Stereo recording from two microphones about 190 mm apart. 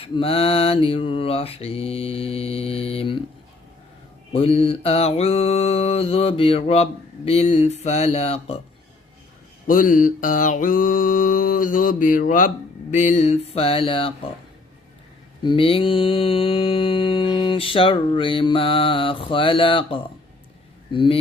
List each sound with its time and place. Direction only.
0.0 s mantra: 30° left (ahead or behind)
4.3 s mantra: 30° left (ahead or behind)
9.6 s mantra: 45° left (ahead or behind); by 14.1 s 30° left (ahead or behind)
15.4 s mantra: 30° left (ahead or behind)